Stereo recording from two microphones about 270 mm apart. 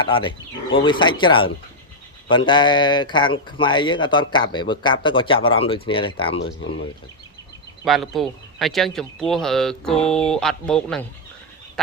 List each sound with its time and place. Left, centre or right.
0.0 s speech: centre
7.9 s speech: centre